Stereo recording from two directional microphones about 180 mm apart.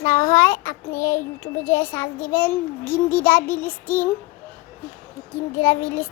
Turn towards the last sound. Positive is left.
turn(degrees=10)  # may be behind; listen again after turning